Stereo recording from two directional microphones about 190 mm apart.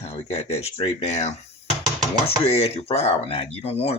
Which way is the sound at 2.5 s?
30° left (ahead or behind).